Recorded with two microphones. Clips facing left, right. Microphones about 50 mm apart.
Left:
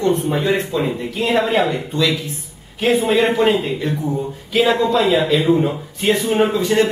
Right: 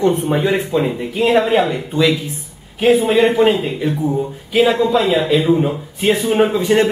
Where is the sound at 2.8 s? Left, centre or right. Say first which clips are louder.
Right 3 dB; centre.